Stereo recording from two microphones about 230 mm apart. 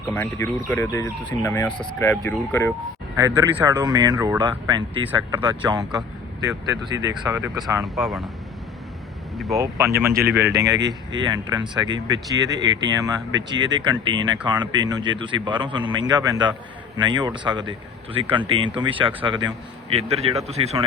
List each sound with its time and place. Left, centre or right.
0.1 s speech: centre
1.8 s speech: centre
2.0 s speech: centre
3.2 s speech: centre
7.9 s speech: centre
9.6 s speech: centre